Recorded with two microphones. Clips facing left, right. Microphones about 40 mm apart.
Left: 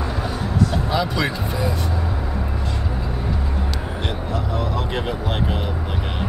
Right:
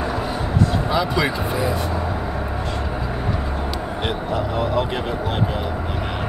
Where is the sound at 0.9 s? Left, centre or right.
Centre.